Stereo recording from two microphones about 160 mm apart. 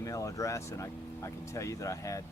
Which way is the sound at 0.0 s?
20° left (ahead or behind).